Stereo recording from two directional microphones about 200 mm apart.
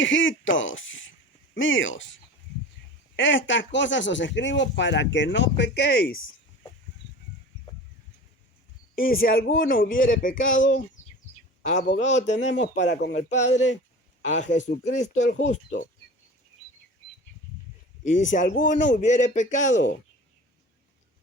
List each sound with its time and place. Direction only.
0.0 s speech: 70° left (ahead or behind); by 6.1 s 55° left (ahead or behind)
9.0 s a man's voice: 45° left (ahead or behind)
11.9 s speech: 35° left (ahead or behind)
18.0 s speech: 40° left (ahead or behind)